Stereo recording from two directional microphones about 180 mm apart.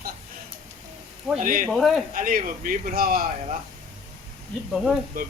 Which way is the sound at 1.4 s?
50° right (ahead or behind).